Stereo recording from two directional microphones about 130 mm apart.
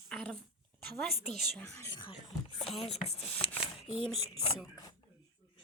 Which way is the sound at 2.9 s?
50° left (ahead or behind).